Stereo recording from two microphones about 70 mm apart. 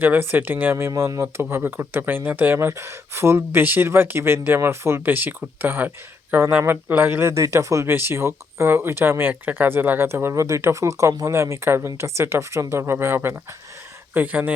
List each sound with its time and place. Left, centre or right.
0.0 s speech: right